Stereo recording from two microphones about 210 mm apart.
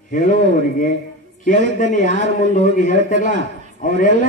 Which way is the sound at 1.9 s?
40° left (ahead or behind).